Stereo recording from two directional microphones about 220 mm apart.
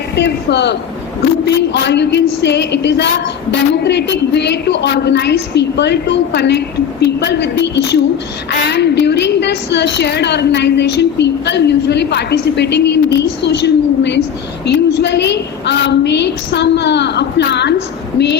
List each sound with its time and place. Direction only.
0.2 s a woman's voice: 50° left (ahead or behind)